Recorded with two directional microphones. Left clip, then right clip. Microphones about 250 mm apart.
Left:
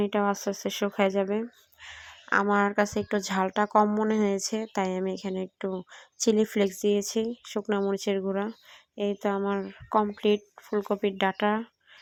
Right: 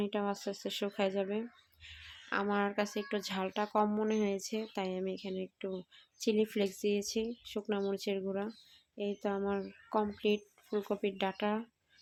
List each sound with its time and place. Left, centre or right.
0.0 s speech: centre